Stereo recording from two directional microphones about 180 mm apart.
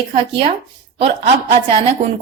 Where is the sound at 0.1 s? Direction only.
30° right (ahead or behind).